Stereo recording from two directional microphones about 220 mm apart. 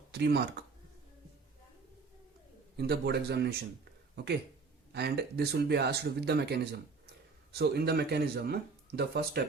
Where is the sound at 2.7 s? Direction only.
45° right (ahead or behind).